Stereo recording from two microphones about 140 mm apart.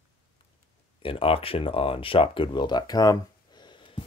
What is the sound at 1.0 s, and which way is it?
Speech, 40° left (ahead or behind).